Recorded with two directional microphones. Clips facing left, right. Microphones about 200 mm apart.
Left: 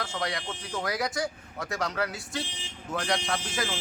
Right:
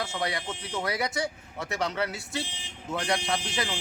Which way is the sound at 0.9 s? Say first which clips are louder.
Even; 25° right (ahead or behind).